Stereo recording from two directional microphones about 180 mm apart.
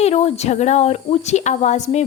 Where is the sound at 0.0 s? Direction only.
35° left (ahead or behind).